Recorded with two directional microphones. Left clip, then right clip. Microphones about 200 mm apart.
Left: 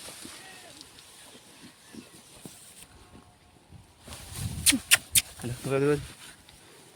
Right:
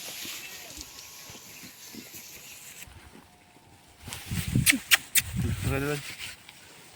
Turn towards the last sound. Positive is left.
turn(degrees=65)  # may be behind; listen again after turning